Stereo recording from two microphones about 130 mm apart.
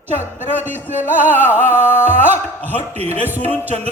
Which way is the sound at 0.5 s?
15° right (ahead or behind).